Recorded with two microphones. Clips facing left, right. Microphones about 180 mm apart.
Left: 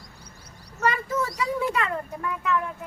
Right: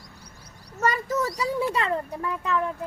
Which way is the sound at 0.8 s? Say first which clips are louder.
Right 1 dB; 40° right (ahead or behind).